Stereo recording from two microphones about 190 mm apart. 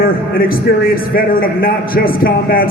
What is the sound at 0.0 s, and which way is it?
A man's voice, 50° left (ahead or behind).